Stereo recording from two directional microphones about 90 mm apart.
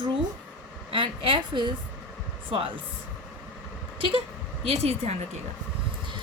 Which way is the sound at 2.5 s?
75° right (ahead or behind).